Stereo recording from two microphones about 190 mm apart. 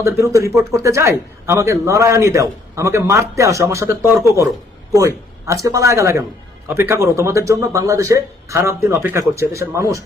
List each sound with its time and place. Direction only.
0.0 s a man's voice: 15° right (ahead or behind)